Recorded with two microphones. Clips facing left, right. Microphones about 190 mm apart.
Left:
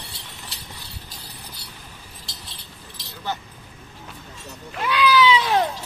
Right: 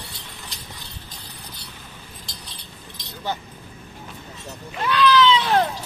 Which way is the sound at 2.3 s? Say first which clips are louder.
Right 1 dB; centre (ahead or behind).